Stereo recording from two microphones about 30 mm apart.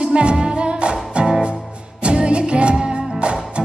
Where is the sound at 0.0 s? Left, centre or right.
Right.